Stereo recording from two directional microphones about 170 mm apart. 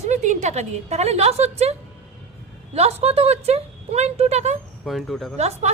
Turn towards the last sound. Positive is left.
turn(degrees=-40)  # may be behind; listen again after turning